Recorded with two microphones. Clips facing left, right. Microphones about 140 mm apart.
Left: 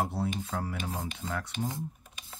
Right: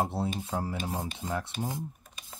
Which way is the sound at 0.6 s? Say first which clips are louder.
Right 2 dB; 25° right (ahead or behind).